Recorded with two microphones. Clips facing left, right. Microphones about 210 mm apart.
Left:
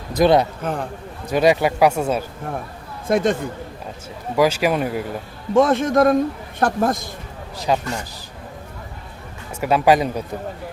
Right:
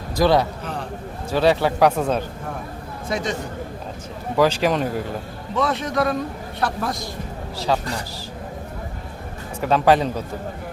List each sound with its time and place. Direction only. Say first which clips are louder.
0.1 s a man's voice: left 3 dB; 20° left (ahead or behind)
0.6 s a man's voice: left 5 dB; 50° left (ahead or behind)
1.3 s speech: left 2 dB; 15° left (ahead or behind)
3.1 s a man's voice: left 7 dB; 55° left (ahead or behind)
4.4 s speech: left 1 dB; 10° left (ahead or behind)
5.5 s a man's voice: left 7 dB; 50° left (ahead or behind)
7.5 s speech: left 2 dB; 15° left (ahead or behind)
9.6 s speech: left 1 dB; 10° left (ahead or behind)